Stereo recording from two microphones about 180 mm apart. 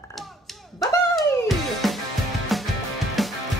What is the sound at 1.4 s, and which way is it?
Music, centre (ahead or behind).